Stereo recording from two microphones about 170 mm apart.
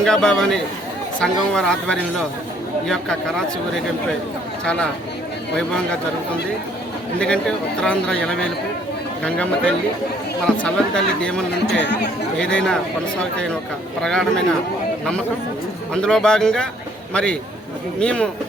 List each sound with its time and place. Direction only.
0.0 s speech: 5° left (ahead or behind)
7.2 s speech: 5° left (ahead or behind)
11.6 s speech: 85° left
12.4 s speech: 5° left (ahead or behind)
14.0 s speech: 5° left (ahead or behind)
16.0 s speech: 5° left (ahead or behind)
18.0 s speech: 5° left (ahead or behind)